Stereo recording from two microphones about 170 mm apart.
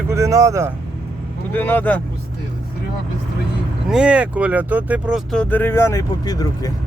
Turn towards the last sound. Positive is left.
turn(degrees=20)  # may be behind; listen again after turning